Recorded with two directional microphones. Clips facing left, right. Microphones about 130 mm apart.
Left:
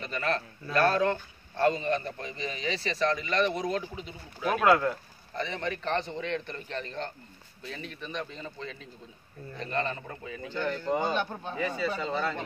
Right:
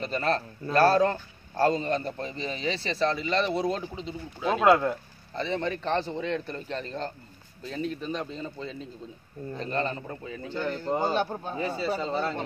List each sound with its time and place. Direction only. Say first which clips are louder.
0.0 s a man's voice: right 4 dB; 35° right (ahead or behind); by 4.9 s 15° right (ahead or behind)
5.3 s a man's voice: right 4 dB; 30° right (ahead or behind)